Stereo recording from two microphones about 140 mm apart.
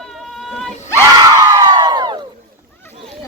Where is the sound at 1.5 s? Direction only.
30° right (ahead or behind).